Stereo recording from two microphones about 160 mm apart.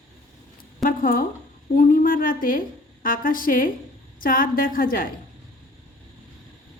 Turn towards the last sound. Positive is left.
turn(degrees=60)  # may be behind; listen again after turning